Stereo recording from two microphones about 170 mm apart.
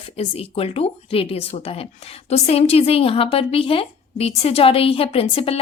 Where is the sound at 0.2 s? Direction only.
35° left (ahead or behind).